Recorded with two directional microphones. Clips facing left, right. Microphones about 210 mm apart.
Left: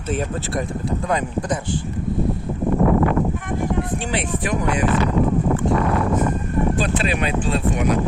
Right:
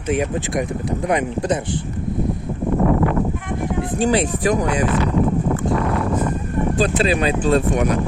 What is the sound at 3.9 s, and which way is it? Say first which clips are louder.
Speech: right 6 dB; 40° right (ahead or behind).